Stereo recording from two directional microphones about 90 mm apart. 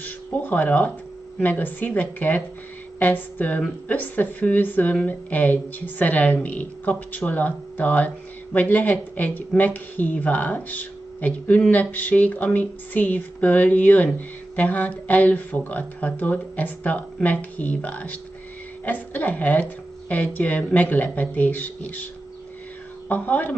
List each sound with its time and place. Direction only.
0.0 s a woman's voice: 20° left (ahead or behind)
23.0 s a woman's voice: 20° left (ahead or behind)